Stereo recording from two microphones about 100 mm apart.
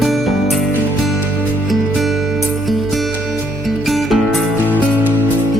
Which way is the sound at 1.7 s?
Centre (ahead or behind).